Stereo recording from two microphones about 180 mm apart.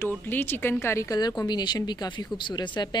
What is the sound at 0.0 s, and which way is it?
A woman's voice, 10° left (ahead or behind).